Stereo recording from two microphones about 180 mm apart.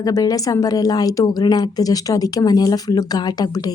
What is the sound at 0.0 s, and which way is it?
A woman's voice, 20° left (ahead or behind).